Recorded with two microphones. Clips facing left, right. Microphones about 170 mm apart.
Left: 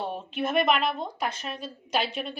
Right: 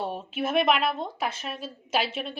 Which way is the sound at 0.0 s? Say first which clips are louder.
Even; 5° right (ahead or behind).